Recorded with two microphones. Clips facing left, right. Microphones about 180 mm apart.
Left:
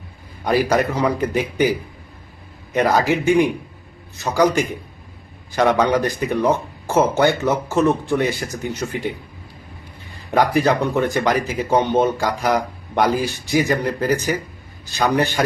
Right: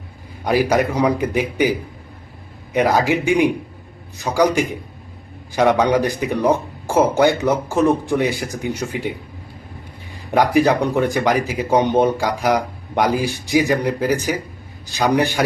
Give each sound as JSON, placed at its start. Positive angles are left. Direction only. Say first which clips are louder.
{"t": 0.4, "sound": "speech", "louder": "right 1 dB", "side_deg": -10}
{"t": 2.7, "sound": "speech", "louder": "right 1 dB", "side_deg": -10}
{"t": 10.3, "sound": "speech", "louder": "right 2 dB", "side_deg": -15}